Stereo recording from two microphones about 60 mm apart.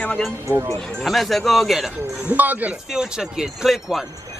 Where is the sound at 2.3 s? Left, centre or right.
Right.